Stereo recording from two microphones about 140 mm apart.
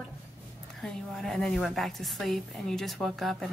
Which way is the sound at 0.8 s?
Centre (ahead or behind).